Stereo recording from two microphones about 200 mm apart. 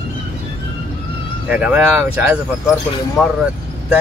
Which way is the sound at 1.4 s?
5° right (ahead or behind).